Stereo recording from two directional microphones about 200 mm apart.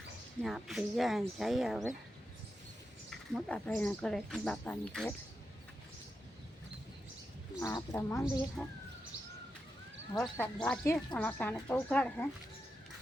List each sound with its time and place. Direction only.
0.4 s speech: centre (ahead or behind)
3.1 s speech: 5° left (ahead or behind)
7.6 s speech: 20° left (ahead or behind)
8.6 s speech: centre (ahead or behind)
10.2 s speech: 5° left (ahead or behind)